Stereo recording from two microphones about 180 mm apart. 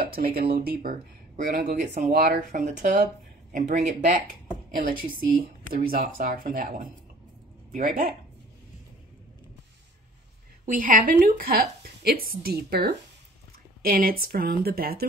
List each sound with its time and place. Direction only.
0.0 s speech: 55° right (ahead or behind)
10.6 s a woman's voice: 50° right (ahead or behind)